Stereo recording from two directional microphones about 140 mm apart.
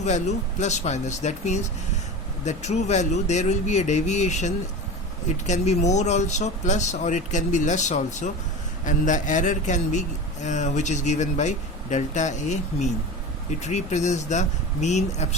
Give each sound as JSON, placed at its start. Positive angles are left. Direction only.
{"t": 0.0, "sound": "a man's voice", "side_deg": 55}